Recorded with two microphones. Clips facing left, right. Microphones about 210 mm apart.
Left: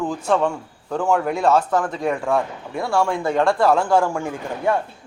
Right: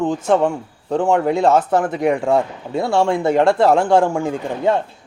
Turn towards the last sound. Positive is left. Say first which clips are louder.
# right 4 dB
turn(degrees=-20)  # may be behind; listen again after turning